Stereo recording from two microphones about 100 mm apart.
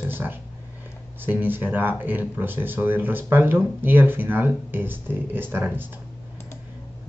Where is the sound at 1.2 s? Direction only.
20° right (ahead or behind).